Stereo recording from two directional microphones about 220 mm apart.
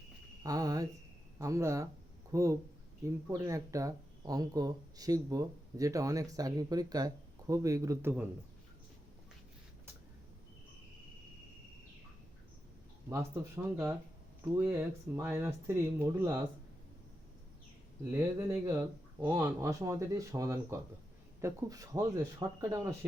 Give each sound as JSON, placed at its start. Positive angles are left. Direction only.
{"t": 0.4, "sound": "speech", "side_deg": -15}
{"t": 13.1, "sound": "speech", "side_deg": -15}
{"t": 18.1, "sound": "speech", "side_deg": -15}